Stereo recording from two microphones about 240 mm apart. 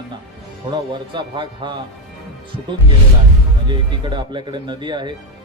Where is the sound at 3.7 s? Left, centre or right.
Centre.